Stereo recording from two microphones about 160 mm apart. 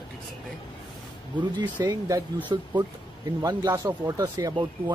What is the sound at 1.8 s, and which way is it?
Speech, 20° right (ahead or behind).